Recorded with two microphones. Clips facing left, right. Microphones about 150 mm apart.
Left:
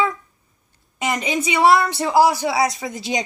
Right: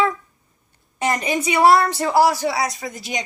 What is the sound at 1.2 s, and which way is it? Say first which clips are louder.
Speech: even; 20° left (ahead or behind).